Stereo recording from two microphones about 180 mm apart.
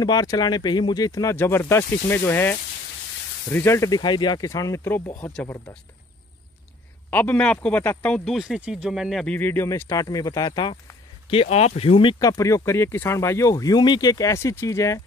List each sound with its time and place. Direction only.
0.0 s speech: 20° left (ahead or behind)
3.5 s speech: 15° left (ahead or behind)
7.1 s speech: 10° left (ahead or behind)